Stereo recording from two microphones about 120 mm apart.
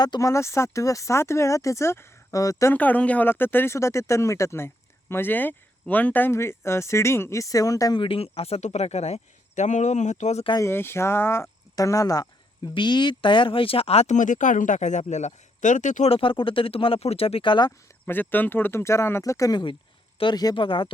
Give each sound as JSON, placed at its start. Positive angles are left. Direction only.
{"t": 0.0, "sound": "speech", "side_deg": 30}
{"t": 2.7, "sound": "speech", "side_deg": 15}
{"t": 7.9, "sound": "speech", "side_deg": 50}
{"t": 10.6, "sound": "speech", "side_deg": 20}
{"t": 16.0, "sound": "speech", "side_deg": 50}
{"t": 18.0, "sound": "speech", "side_deg": 15}